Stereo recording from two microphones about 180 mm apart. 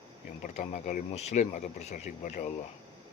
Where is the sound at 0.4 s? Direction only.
40° left (ahead or behind).